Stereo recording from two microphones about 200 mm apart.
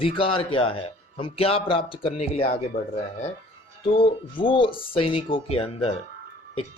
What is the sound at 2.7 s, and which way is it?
Speech, 50° left (ahead or behind).